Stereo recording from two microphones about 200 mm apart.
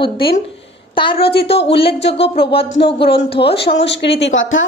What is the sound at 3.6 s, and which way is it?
A woman's voice, 60° left (ahead or behind).